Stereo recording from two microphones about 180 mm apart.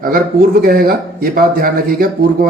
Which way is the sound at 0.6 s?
55° right (ahead or behind).